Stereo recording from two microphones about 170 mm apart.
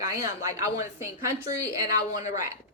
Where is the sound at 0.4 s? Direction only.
20° right (ahead or behind).